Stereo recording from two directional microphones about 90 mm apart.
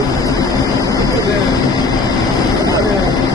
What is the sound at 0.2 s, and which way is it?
Vehicle, 40° left (ahead or behind).